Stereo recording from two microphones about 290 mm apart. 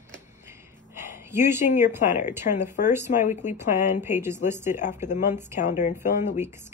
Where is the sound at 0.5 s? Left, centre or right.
Centre.